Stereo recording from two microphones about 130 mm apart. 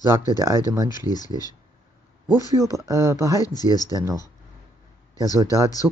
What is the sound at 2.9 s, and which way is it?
Speech, 20° right (ahead or behind).